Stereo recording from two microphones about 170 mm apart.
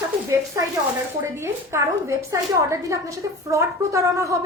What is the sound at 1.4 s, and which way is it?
A woman's voice, 15° right (ahead or behind).